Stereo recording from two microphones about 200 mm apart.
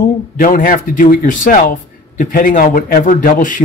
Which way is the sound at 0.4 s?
45° left (ahead or behind).